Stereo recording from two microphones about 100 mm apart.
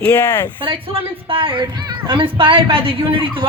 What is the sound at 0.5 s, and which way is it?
Speech, 60° right (ahead or behind).